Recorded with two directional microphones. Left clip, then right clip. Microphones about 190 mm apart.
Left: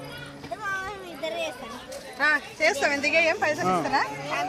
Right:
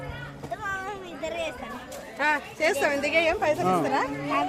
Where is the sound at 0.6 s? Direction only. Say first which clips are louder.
Left 2 dB; centre (ahead or behind).